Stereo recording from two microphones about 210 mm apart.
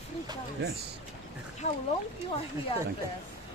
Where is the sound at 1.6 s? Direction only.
30° left (ahead or behind).